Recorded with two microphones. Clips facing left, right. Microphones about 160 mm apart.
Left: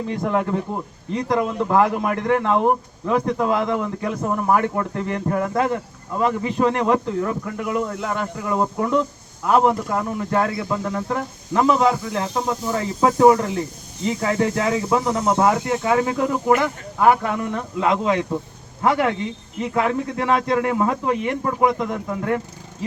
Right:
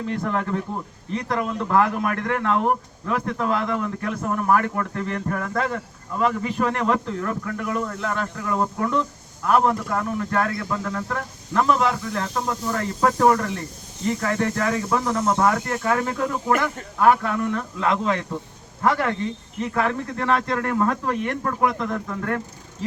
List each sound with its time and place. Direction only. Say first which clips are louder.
0.1 s a man's voice: left 4 dB; 15° left (ahead or behind)